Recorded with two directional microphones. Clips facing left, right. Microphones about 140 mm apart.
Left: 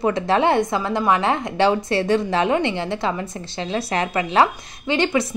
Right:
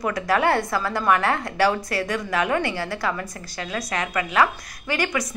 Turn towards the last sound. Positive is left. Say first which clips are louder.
# left 5 dB
turn(degrees=25)  # may be behind; listen again after turning